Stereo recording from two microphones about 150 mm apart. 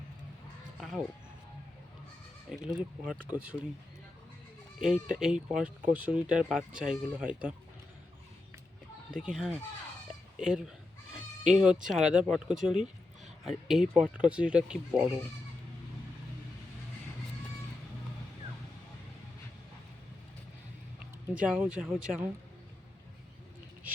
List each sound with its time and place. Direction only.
0.8 s a sound: centre (ahead or behind)
2.5 s speech: centre (ahead or behind)
4.8 s speech: 5° right (ahead or behind)
9.2 s speech: 5° right (ahead or behind)
12.7 s a sound: 50° right (ahead or behind)
13.4 s speech: centre (ahead or behind)
21.3 s speech: 10° right (ahead or behind)